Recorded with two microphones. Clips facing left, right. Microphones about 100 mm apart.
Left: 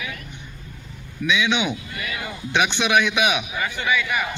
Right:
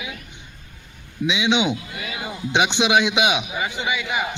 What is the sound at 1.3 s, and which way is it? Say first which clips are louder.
A man's voice: right 1 dB; 20° right (ahead or behind).